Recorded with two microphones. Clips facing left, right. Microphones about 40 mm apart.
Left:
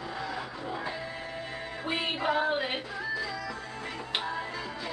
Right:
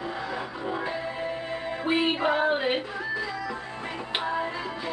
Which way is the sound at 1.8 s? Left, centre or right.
Centre.